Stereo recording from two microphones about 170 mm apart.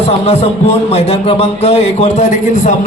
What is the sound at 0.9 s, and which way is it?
A man's voice, 35° left (ahead or behind).